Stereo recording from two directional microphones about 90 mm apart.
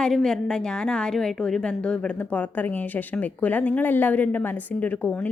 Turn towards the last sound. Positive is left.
turn(degrees=20)  # may be behind; listen again after turning